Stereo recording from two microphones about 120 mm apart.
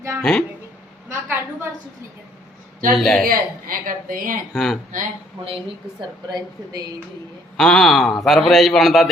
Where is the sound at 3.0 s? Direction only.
5° left (ahead or behind).